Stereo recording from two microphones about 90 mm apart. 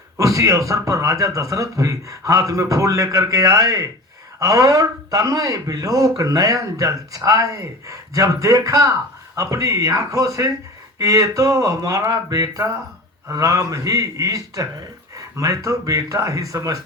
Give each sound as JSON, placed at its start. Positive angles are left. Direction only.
{"t": 0.2, "sound": "a man's voice", "side_deg": -35}